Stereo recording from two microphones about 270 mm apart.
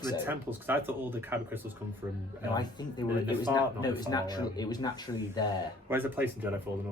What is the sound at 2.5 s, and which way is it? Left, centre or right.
Speech, centre.